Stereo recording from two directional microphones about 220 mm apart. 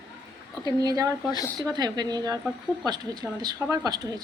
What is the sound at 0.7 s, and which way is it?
A woman's voice, 15° right (ahead or behind).